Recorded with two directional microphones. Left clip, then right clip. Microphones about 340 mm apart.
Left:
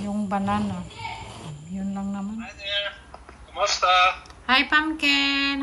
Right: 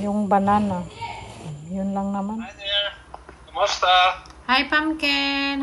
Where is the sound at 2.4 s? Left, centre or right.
Centre.